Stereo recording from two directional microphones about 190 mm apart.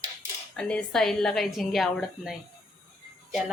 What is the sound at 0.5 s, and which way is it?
A woman's voice, 5° left (ahead or behind).